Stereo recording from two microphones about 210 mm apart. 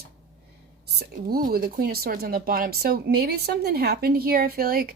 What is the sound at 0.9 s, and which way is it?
A woman's voice, 45° right (ahead or behind).